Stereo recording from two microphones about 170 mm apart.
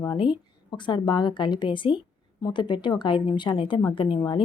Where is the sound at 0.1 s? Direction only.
25° left (ahead or behind).